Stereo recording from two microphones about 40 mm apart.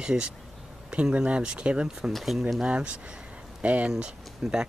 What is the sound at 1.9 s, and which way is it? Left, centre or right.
Speech, centre.